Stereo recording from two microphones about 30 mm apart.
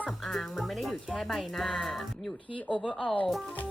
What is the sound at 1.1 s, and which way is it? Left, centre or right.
Speech, centre.